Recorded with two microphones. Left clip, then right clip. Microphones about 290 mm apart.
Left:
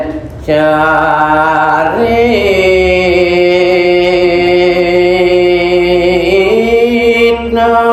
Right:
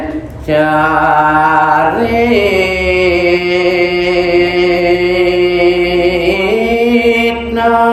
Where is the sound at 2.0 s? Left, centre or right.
Centre.